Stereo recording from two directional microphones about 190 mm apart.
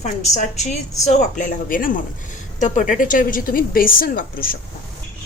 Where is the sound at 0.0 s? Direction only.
35° left (ahead or behind).